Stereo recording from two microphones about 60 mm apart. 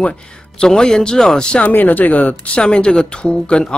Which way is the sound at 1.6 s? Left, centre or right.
Left.